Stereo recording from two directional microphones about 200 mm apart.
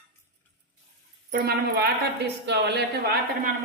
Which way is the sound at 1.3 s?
55° right (ahead or behind).